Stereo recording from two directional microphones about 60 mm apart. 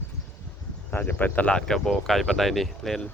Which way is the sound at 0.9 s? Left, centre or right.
Left.